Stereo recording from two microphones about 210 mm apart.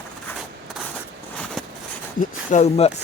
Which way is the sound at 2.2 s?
35° left (ahead or behind).